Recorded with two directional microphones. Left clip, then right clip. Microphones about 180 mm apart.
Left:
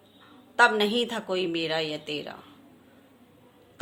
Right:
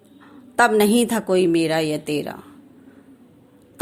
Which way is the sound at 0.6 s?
40° right (ahead or behind).